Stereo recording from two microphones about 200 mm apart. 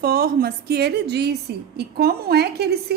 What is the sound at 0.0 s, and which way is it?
A woman's voice, 50° right (ahead or behind).